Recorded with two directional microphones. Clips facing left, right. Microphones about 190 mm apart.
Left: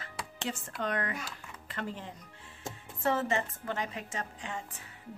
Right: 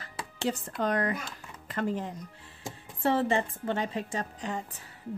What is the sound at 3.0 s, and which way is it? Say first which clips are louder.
A woman's voice: right 4 dB; 30° right (ahead or behind).